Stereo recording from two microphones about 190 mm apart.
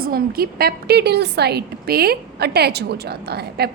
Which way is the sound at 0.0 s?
50° right (ahead or behind).